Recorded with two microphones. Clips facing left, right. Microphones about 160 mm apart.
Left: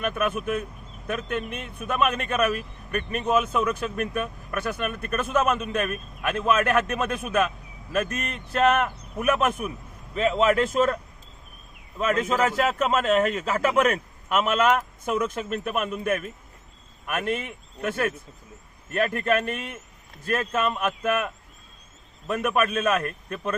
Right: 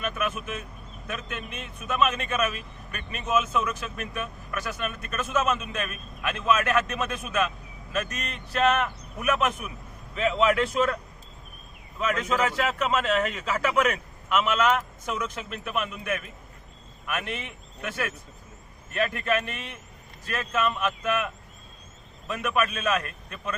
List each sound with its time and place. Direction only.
0.0 s speech: 55° left (ahead or behind)
11.9 s speech: 45° left (ahead or behind)
22.3 s speech: 50° left (ahead or behind)